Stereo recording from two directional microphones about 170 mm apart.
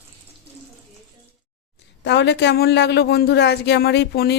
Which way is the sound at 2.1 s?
90° left.